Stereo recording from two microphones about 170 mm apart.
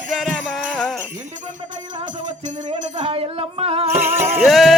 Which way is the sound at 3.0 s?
35° right (ahead or behind).